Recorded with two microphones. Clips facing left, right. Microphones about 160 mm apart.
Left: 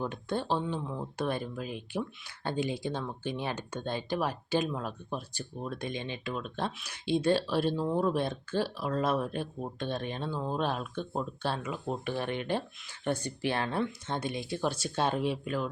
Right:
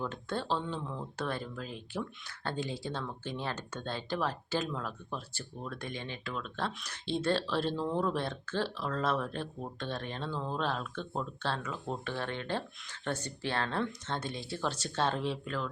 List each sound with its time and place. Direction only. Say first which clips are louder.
0.0 s speech: left 3 dB; 15° left (ahead or behind)